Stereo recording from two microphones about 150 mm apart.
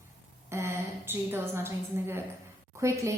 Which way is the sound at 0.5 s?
15° right (ahead or behind).